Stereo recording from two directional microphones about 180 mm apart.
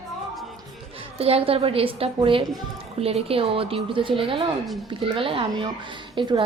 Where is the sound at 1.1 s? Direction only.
35° right (ahead or behind).